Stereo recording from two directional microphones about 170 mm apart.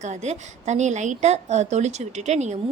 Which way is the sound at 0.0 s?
45° right (ahead or behind).